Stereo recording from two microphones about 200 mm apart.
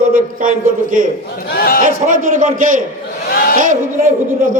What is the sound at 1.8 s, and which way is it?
Speech, 40° right (ahead or behind).